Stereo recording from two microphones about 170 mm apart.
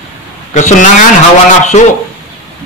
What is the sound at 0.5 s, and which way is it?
A man's voice, 45° left (ahead or behind).